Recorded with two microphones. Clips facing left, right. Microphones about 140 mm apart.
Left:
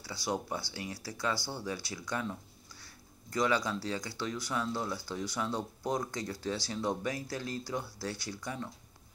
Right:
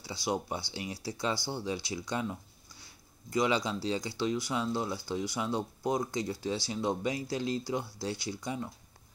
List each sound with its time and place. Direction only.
0.0 s speech: 15° right (ahead or behind)